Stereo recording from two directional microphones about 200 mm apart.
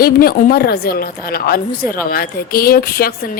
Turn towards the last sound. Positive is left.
turn(degrees=50)  # may be behind; listen again after turning